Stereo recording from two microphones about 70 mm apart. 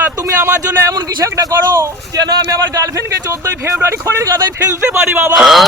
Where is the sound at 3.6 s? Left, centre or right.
Right.